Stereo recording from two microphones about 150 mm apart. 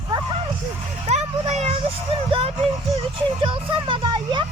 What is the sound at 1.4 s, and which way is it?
Music, 45° right (ahead or behind).